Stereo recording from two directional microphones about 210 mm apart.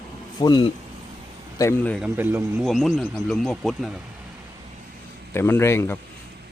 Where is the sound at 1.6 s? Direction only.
10° left (ahead or behind).